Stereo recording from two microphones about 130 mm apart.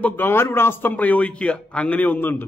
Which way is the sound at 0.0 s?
15° left (ahead or behind).